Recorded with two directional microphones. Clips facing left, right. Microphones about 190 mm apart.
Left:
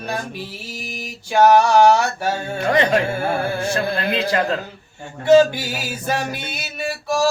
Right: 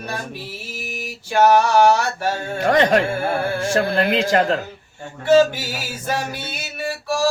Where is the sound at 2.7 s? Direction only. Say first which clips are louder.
Right 2 dB; 45° right (ahead or behind).